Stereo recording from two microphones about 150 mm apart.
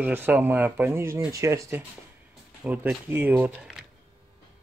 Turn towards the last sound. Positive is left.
turn(degrees=-5)  # may be behind; listen again after turning